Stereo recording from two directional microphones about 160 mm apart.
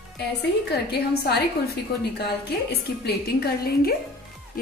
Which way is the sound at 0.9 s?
90° left.